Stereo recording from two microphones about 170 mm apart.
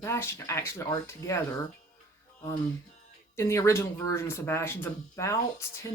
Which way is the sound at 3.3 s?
15° left (ahead or behind).